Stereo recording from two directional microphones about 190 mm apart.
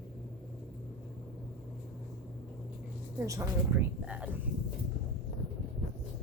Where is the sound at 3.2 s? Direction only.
15° right (ahead or behind).